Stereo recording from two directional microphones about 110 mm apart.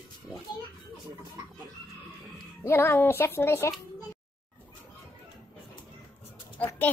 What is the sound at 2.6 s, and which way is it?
A child's voice, 20° left (ahead or behind).